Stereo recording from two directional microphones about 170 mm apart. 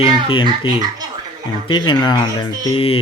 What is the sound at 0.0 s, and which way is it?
Speech, 30° left (ahead or behind).